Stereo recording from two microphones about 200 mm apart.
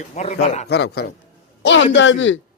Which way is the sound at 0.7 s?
55° left (ahead or behind).